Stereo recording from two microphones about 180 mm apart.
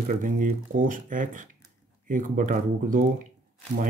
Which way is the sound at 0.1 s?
45° right (ahead or behind).